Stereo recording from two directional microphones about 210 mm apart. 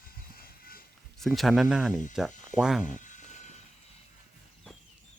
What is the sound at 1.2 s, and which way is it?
Speech, centre (ahead or behind).